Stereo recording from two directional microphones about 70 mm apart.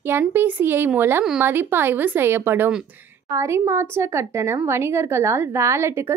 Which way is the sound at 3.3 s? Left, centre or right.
Right.